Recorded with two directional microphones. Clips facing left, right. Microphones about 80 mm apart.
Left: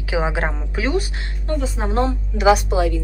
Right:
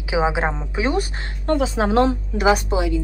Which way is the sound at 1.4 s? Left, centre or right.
Right.